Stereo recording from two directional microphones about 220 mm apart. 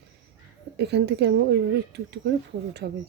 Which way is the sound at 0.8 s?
50° right (ahead or behind).